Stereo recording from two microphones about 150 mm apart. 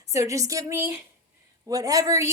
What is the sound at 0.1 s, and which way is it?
A woman's voice, 20° right (ahead or behind).